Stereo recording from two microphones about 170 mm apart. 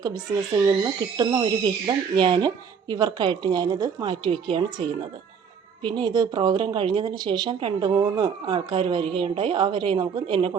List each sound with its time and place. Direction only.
0.0 s speech: 20° right (ahead or behind)